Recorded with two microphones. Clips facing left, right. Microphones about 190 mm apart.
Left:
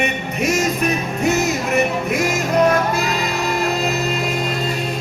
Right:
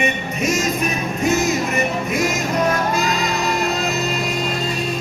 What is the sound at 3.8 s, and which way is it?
Music, 60° left (ahead or behind).